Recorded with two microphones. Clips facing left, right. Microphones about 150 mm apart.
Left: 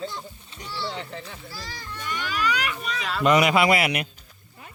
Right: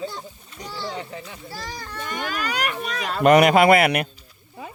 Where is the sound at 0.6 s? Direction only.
45° right (ahead or behind).